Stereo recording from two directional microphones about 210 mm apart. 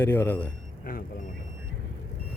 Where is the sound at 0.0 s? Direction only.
10° left (ahead or behind).